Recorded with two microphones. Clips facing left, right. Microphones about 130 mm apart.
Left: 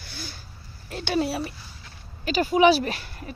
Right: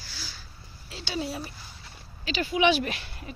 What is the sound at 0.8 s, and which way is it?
Speech, 55° left (ahead or behind).